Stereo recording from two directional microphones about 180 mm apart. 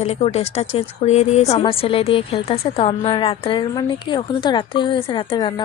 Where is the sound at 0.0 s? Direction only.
35° left (ahead or behind).